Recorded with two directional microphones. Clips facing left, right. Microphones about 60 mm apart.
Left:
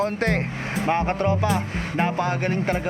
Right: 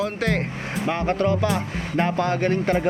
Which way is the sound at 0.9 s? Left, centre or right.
Left.